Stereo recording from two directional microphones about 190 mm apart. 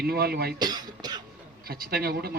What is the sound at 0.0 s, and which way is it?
Speech, 55° right (ahead or behind).